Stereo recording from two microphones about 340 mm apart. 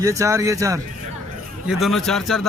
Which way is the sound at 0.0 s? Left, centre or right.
Centre.